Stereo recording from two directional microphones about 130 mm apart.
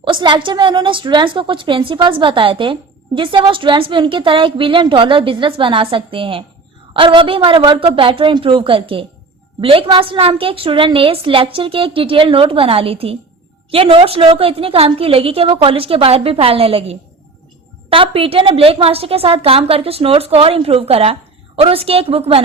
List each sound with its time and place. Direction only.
0.0 s a woman's voice: 40° right (ahead or behind)